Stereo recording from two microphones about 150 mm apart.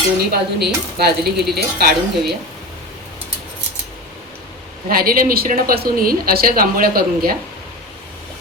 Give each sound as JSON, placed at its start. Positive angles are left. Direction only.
{"t": 0.3, "sound": "speech", "side_deg": -90}
{"t": 4.9, "sound": "speech", "side_deg": -75}